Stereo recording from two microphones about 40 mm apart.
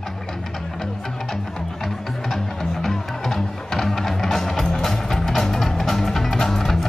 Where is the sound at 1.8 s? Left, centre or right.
Centre.